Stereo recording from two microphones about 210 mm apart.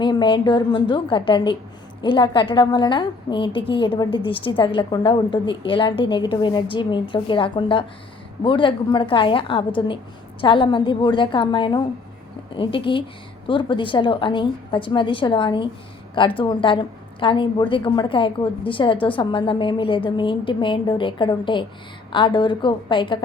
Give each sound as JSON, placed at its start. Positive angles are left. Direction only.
{"t": 0.0, "sound": "a woman's voice", "side_deg": 20}